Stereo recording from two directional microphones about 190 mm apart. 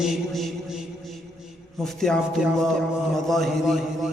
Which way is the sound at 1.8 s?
Centre (ahead or behind).